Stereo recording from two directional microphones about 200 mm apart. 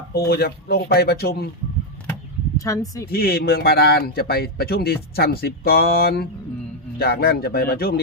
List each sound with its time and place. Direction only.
0.3 s speech: 50° left (ahead or behind)
2.6 s speech: 15° left (ahead or behind)
3.1 s speech: 50° left (ahead or behind)